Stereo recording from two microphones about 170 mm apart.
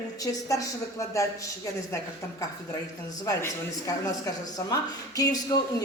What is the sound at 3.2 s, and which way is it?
Speech, 20° left (ahead or behind).